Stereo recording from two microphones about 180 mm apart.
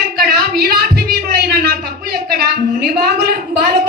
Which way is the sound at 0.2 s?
60° right (ahead or behind).